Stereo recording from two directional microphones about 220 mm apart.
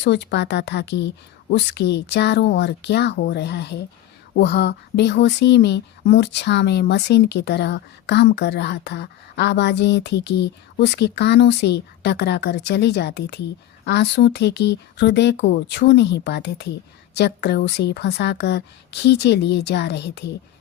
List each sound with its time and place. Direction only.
0.0 s speech: 50° left (ahead or behind)